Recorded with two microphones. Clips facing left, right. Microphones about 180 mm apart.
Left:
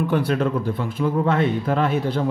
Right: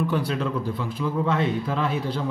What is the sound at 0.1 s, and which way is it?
Speech, 55° left (ahead or behind).